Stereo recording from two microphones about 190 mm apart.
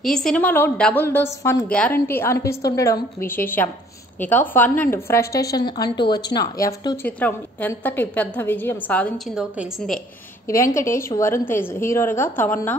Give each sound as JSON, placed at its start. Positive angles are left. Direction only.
{"t": 0.0, "sound": "a woman's voice", "side_deg": 5}
{"t": 7.1, "sound": "a woman's voice", "side_deg": 10}
{"t": 9.4, "sound": "a woman's voice", "side_deg": -5}
{"t": 10.5, "sound": "a woman's voice", "side_deg": 15}